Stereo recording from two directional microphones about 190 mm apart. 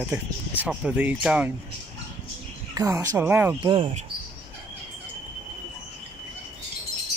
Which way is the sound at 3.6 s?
25° right (ahead or behind).